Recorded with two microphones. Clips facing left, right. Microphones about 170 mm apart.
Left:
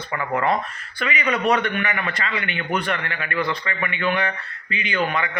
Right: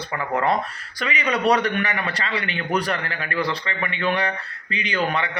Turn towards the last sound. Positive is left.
turn(degrees=-35)  # may be behind; listen again after turning